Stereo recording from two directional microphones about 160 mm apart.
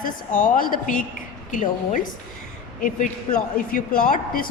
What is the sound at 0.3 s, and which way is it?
A woman's voice, 65° left (ahead or behind).